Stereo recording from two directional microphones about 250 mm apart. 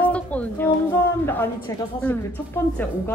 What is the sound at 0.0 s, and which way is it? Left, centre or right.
Music, centre.